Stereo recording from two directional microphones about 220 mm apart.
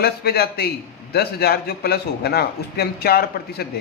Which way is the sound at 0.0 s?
45° left (ahead or behind).